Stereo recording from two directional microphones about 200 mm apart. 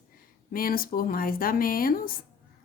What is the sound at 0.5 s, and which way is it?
A woman's voice, 45° left (ahead or behind).